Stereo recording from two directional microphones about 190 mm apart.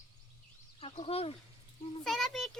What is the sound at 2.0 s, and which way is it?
Speech, centre (ahead or behind).